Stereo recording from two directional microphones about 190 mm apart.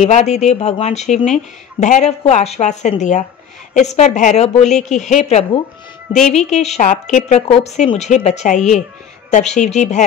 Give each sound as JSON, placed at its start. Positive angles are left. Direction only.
{"t": 0.0, "sound": "a woman's voice", "side_deg": 35}